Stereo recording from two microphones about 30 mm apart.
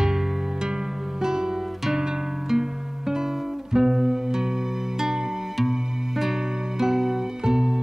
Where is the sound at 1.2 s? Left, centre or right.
Centre.